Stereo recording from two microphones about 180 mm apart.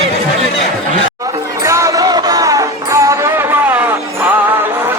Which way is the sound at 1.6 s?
15° right (ahead or behind).